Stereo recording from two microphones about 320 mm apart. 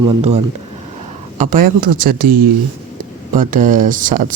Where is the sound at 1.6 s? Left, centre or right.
Right.